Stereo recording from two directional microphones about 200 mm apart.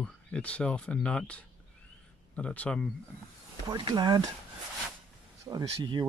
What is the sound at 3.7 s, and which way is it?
Speech, 20° right (ahead or behind).